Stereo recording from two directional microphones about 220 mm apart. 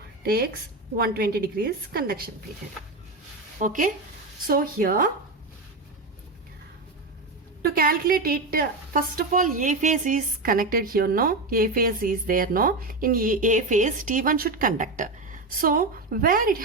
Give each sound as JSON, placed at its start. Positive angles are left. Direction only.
{"t": 0.2, "sound": "a woman's voice", "side_deg": -45}
{"t": 3.6, "sound": "a woman's voice", "side_deg": -35}
{"t": 7.6, "sound": "a woman's voice", "side_deg": -40}